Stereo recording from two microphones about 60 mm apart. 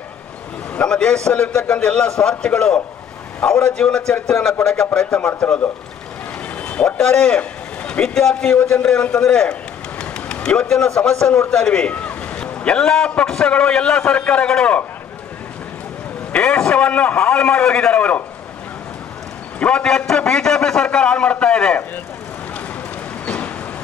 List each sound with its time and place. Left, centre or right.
0.8 s a man's voice: centre
6.6 s vehicle: left
7.0 s a man's voice: centre
8.1 s a man's voice: centre
8.5 s a man's voice: left
11.5 s a sound: centre
12.6 s a man's voice: centre
16.3 s a man's voice: left
19.6 s a man's voice: centre
23.2 s vehicle: left